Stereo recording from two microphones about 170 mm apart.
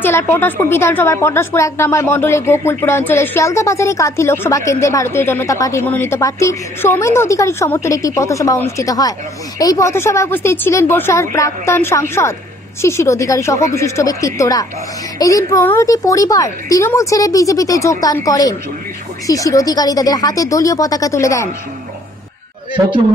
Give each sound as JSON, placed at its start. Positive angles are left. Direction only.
{"t": 0.0, "sound": "a woman's voice", "side_deg": 15}